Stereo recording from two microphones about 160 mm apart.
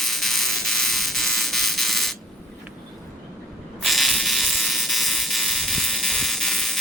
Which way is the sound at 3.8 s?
Centre (ahead or behind).